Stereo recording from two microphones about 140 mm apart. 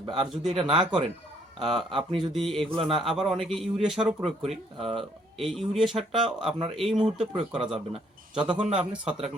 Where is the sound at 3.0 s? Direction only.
5° right (ahead or behind).